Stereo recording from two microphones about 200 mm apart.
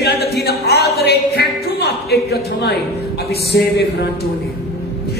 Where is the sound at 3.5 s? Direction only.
55° left (ahead or behind).